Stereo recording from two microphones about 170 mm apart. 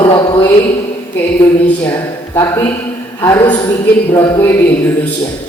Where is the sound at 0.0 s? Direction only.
30° left (ahead or behind).